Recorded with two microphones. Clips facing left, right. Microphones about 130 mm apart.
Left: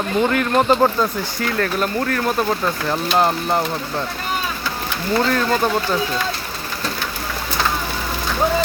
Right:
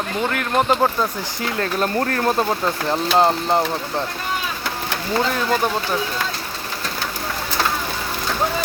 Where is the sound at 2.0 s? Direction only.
35° right (ahead or behind).